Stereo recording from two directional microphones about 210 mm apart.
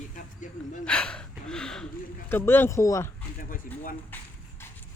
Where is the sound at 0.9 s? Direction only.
5° left (ahead or behind).